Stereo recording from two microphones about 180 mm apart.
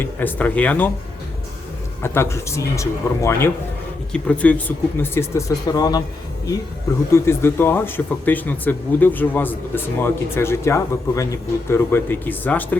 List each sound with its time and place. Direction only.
0.0 s speech: 10° left (ahead or behind)
2.0 s speech: 15° left (ahead or behind)
7.1 s speech: 15° left (ahead or behind)